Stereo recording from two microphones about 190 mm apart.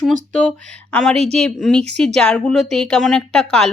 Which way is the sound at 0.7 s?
5° left (ahead or behind).